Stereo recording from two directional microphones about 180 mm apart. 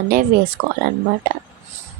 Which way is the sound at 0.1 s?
50° right (ahead or behind).